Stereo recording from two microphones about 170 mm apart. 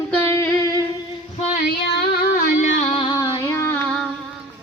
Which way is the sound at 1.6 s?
70° left (ahead or behind).